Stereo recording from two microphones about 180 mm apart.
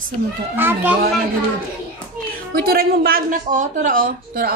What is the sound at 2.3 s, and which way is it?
A woman's voice, 55° right (ahead or behind).